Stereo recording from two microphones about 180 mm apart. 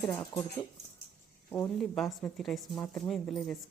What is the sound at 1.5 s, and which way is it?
A woman's voice, 5° left (ahead or behind).